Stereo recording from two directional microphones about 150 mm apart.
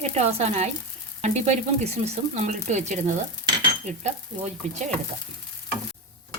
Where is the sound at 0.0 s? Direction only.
45° right (ahead or behind).